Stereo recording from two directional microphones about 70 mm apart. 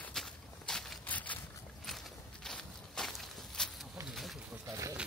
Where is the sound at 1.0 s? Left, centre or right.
Left.